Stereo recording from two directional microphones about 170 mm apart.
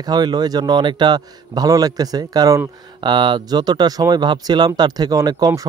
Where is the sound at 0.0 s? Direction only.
25° right (ahead or behind).